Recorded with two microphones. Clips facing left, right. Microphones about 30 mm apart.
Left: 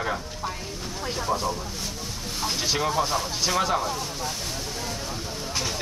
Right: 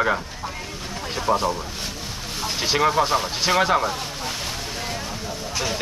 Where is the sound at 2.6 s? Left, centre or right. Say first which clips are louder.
Right 6 dB; right.